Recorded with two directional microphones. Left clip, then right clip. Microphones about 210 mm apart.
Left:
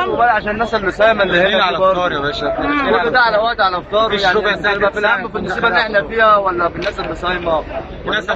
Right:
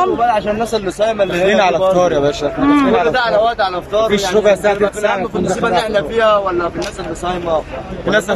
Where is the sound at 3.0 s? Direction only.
5° right (ahead or behind).